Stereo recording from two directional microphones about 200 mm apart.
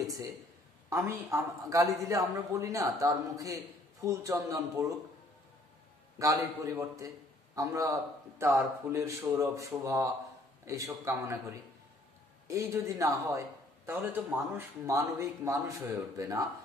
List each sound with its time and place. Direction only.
0.8 s a man's voice: 15° right (ahead or behind)
6.1 s a man's voice: 15° right (ahead or behind)
12.4 s a man's voice: 15° right (ahead or behind)